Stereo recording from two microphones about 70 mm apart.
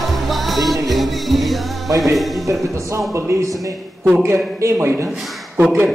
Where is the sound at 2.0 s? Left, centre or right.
Centre.